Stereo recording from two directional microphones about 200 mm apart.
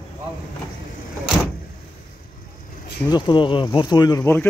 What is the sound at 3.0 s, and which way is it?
Speech, 20° left (ahead or behind).